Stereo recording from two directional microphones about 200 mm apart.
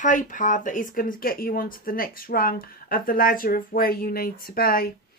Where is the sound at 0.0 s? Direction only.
40° left (ahead or behind).